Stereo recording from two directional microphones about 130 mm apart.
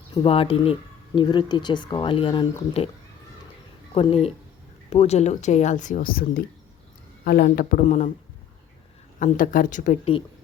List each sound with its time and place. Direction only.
0.1 s speech: 45° left (ahead or behind)
3.9 s speech: 50° left (ahead or behind); by 6.2 s 90° left
7.4 s speech: 90° left; by 8.1 s 60° left (ahead or behind)
9.1 s speech: 85° left
10.0 s speech: 45° left (ahead or behind)